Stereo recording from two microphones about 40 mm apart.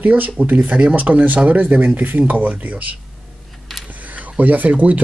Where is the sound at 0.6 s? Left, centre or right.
Right.